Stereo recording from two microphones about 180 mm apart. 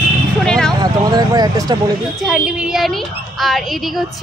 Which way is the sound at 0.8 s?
20° right (ahead or behind).